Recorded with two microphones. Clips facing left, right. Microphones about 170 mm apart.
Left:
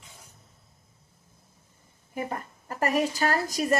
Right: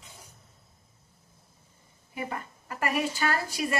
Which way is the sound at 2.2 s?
45° left (ahead or behind).